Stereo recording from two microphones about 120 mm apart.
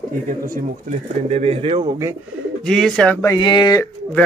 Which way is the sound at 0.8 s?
65° right (ahead or behind).